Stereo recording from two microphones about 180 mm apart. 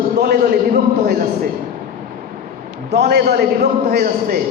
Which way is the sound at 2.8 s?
65° right (ahead or behind).